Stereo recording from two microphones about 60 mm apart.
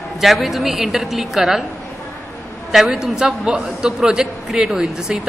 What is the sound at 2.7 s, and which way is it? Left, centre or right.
A man's voice, centre.